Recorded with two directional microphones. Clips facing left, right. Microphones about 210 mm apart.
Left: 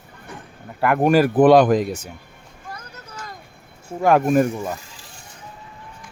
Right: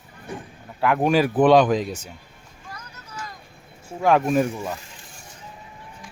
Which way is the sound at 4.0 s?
10° left (ahead or behind).